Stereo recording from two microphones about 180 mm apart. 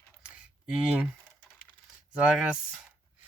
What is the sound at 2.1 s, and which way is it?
Speech, 5° right (ahead or behind).